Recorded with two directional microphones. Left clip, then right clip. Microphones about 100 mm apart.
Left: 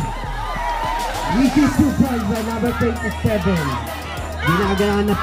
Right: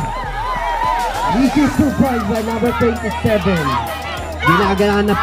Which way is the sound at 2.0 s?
30° right (ahead or behind).